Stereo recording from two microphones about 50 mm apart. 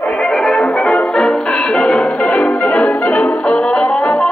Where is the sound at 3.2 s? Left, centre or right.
Left.